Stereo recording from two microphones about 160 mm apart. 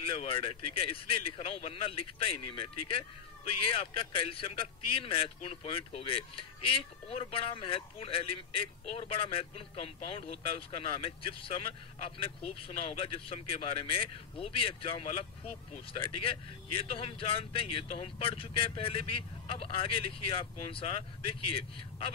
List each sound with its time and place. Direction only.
0.0 s speech: 35° left (ahead or behind)